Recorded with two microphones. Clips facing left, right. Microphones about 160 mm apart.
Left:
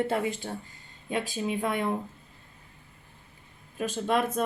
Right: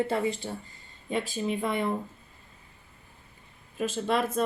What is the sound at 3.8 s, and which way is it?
Speech, centre (ahead or behind).